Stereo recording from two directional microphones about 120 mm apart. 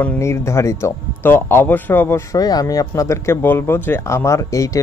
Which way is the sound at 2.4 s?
30° left (ahead or behind).